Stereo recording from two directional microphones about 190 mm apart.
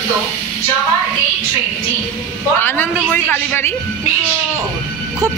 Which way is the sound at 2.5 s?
10° left (ahead or behind).